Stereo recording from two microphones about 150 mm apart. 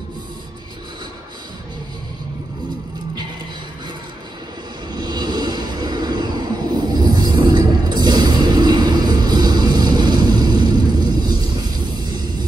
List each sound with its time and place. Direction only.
4.9 s vehicle: 30° right (ahead or behind)